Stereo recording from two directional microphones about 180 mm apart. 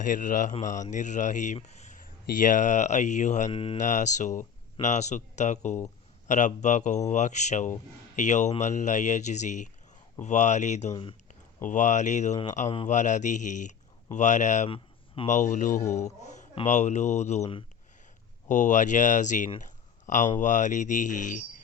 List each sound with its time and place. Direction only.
0.0 s speech: 45° left (ahead or behind)
3.8 s speech: 45° left (ahead or behind)
14.7 s a sound: 30° left (ahead or behind)
15.4 s speech: 45° left (ahead or behind)
18.4 s speech: 45° left (ahead or behind)